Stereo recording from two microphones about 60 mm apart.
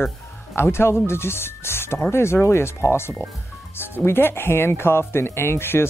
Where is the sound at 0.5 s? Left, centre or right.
Left.